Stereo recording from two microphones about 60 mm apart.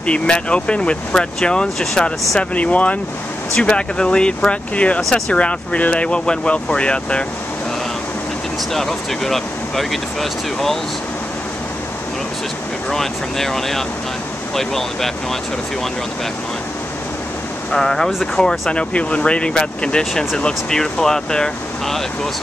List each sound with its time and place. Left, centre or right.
0.0 s speech: centre
8.7 s speech: centre
12.9 s speech: centre
17.6 s speech: centre